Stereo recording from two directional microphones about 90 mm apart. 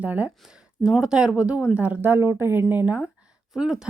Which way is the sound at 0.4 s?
5° right (ahead or behind).